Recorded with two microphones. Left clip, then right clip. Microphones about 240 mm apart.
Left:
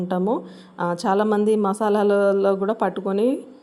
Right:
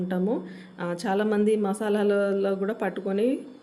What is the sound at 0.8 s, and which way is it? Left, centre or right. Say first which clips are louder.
A woman's voice: left 6 dB; left.